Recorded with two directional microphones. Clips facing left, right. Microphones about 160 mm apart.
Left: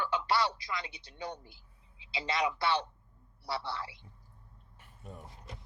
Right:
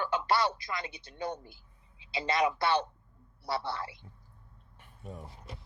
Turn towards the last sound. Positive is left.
turn(degrees=0)  # may be behind; listen again after turning